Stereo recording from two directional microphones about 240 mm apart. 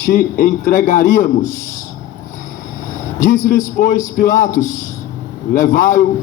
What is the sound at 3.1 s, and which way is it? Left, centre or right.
A man's voice, left.